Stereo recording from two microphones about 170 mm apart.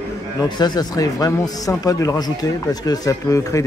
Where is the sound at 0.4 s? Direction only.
25° left (ahead or behind).